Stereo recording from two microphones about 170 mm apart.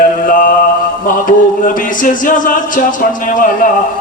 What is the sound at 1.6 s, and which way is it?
Speech, 50° left (ahead or behind).